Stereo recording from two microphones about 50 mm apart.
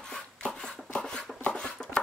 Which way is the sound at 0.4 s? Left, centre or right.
Centre.